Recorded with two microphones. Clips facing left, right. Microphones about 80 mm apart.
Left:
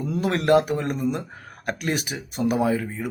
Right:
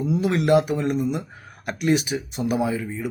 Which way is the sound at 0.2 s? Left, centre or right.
Left.